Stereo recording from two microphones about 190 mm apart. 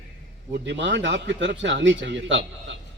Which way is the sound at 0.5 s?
70° right (ahead or behind).